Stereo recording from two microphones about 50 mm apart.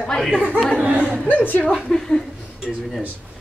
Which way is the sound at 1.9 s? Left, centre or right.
Centre.